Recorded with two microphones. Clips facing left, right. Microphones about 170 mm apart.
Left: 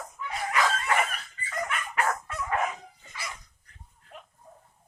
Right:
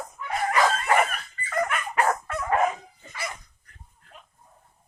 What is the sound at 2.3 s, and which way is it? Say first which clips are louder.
Dog: right 6 dB; 55° right (ahead or behind).